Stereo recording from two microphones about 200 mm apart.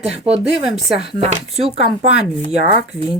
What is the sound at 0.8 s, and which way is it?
Speech, 30° right (ahead or behind).